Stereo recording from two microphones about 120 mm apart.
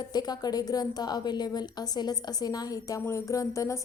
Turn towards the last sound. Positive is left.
turn(degrees=25)  # may be behind; listen again after turning